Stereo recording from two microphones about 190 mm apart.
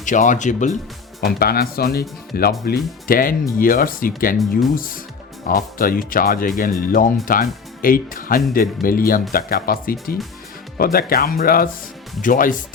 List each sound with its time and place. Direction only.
0.0 s speech: 40° left (ahead or behind)
1.2 s speech: 55° left (ahead or behind)